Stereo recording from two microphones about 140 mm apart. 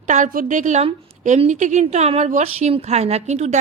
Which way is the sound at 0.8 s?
50° right (ahead or behind).